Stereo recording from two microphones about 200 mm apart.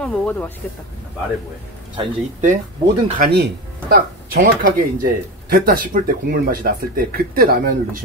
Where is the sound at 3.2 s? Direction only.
55° right (ahead or behind).